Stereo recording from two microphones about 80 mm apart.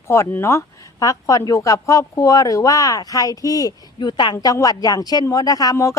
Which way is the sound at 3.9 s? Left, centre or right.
Left.